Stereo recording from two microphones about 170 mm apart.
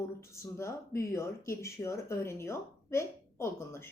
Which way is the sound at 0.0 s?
15° left (ahead or behind).